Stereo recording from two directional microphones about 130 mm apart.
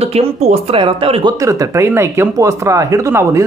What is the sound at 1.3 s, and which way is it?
Speech, 25° right (ahead or behind).